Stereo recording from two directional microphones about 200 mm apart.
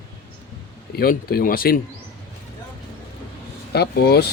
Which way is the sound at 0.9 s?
50° left (ahead or behind).